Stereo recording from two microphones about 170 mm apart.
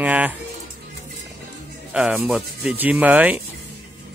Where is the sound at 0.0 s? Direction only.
10° right (ahead or behind).